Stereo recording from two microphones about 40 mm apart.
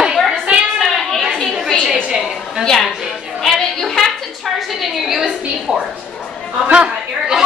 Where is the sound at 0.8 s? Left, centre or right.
Centre.